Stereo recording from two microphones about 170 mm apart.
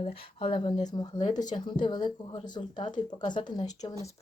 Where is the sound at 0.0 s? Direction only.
30° left (ahead or behind).